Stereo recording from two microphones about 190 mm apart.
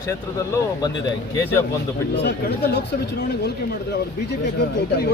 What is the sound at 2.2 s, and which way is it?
Speech, 60° left (ahead or behind).